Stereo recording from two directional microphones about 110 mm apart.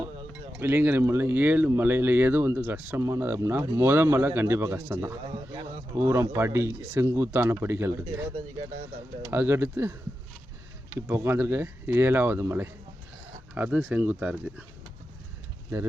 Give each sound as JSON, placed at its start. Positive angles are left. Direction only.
{"t": 0.6, "sound": "speech", "side_deg": -20}
{"t": 5.2, "sound": "a man's voice", "side_deg": -60}
{"t": 6.0, "sound": "speech", "side_deg": -25}
{"t": 9.3, "sound": "speech", "side_deg": -20}
{"t": 11.1, "sound": "speech", "side_deg": -20}